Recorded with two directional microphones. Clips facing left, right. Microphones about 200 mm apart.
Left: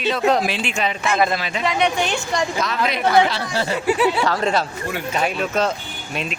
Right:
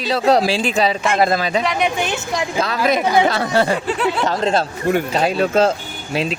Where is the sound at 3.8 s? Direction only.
5° left (ahead or behind).